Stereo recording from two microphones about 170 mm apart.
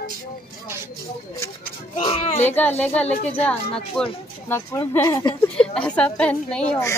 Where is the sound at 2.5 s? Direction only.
10° left (ahead or behind).